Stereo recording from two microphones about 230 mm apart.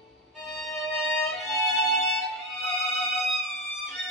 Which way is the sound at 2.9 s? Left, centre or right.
Centre.